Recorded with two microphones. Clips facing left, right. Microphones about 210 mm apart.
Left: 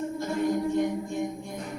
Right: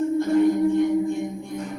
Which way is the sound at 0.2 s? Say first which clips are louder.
Right 8 dB; 55° right (ahead or behind).